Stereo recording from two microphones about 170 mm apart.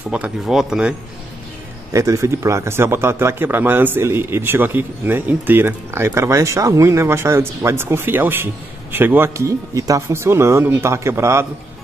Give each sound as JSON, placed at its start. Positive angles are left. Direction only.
{"t": 0.1, "sound": "speech", "side_deg": -5}
{"t": 1.9, "sound": "a man's voice", "side_deg": -20}